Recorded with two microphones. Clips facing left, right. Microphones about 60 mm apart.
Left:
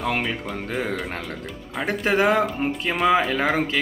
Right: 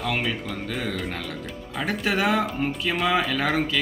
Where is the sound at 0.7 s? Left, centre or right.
Left.